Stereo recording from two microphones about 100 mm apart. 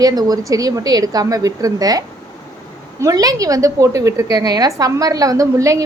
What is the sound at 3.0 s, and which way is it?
A woman's voice, 35° right (ahead or behind).